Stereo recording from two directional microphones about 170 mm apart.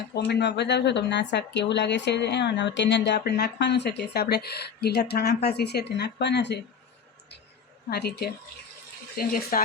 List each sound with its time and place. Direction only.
0.2 s speech: 80° left
7.9 s a woman's voice: 70° left (ahead or behind)
9.1 s speech: 60° left (ahead or behind)